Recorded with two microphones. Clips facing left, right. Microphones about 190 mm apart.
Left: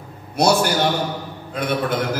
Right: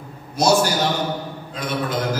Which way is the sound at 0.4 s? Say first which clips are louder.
Left 1 dB; 60° left (ahead or behind).